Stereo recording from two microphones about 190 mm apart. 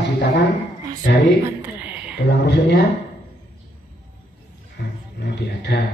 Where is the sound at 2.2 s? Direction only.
60° left (ahead or behind).